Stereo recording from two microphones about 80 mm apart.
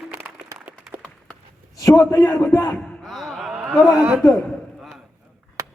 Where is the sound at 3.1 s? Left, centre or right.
Centre.